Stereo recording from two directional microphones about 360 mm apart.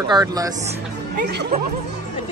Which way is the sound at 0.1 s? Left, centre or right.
Centre.